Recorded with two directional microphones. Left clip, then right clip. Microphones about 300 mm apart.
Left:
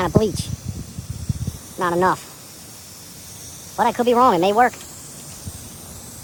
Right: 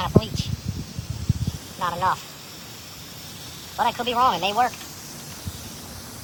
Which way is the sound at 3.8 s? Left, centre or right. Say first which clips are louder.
Left 5 dB; left.